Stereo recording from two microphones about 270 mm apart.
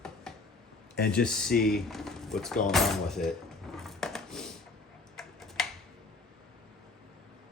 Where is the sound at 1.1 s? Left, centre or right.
Centre.